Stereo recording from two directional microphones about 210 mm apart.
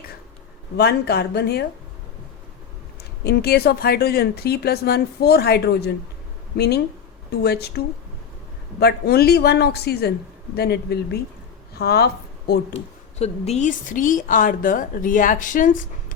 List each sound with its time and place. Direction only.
0.8 s speech: 50° left (ahead or behind)
3.2 s speech: 50° left (ahead or behind)
8.8 s speech: 50° left (ahead or behind)
12.7 s a woman's voice: 30° left (ahead or behind)